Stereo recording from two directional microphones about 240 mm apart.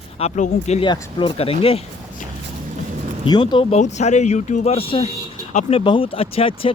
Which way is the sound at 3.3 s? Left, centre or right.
Centre.